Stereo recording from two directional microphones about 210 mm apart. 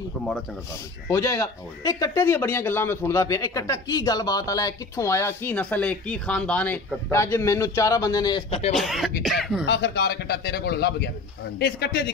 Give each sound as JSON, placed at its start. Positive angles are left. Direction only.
{"t": 1.0, "sound": "speech", "side_deg": 15}
{"t": 8.7, "sound": "speech", "side_deg": 0}
{"t": 9.7, "sound": "a man's voice", "side_deg": 55}